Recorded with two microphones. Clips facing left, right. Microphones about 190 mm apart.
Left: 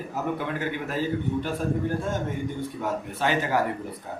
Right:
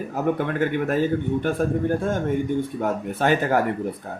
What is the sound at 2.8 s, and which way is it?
Speech, 50° right (ahead or behind).